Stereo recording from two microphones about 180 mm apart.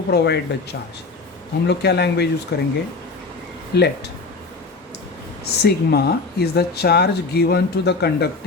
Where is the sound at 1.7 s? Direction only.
65° left (ahead or behind).